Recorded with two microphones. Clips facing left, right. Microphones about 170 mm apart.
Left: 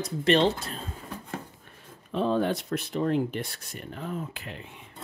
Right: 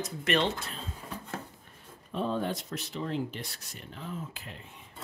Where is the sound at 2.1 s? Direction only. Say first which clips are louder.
Left 6 dB; 85° left.